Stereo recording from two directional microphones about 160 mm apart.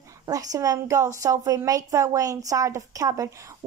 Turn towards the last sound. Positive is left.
turn(degrees=-20)  # may be behind; listen again after turning